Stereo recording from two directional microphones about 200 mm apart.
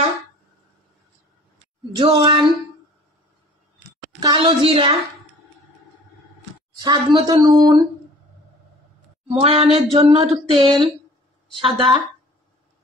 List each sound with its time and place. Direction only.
2.0 s speech: 25° right (ahead or behind)
4.2 s speech: 20° right (ahead or behind)
6.8 s speech: 20° right (ahead or behind)
9.4 s speech: 30° right (ahead or behind)